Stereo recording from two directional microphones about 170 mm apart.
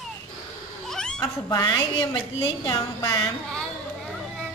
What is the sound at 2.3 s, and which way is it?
Speech, 25° left (ahead or behind).